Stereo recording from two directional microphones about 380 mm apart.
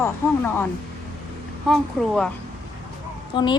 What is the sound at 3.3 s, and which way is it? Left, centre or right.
Speech, centre.